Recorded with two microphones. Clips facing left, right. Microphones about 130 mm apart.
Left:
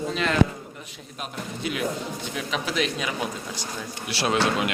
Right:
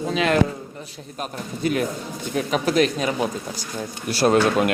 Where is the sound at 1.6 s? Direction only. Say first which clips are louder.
Right 5 dB; 45° right (ahead or behind).